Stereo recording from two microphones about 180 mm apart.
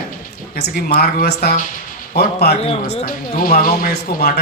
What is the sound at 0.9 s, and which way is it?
A man's voice, 55° left (ahead or behind).